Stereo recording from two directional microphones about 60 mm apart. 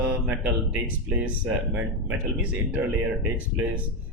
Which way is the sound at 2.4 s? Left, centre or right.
Centre.